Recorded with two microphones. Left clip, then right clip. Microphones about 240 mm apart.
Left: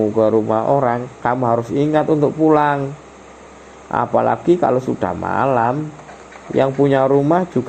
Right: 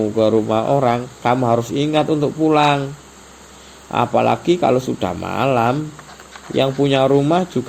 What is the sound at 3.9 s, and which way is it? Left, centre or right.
Speech, right.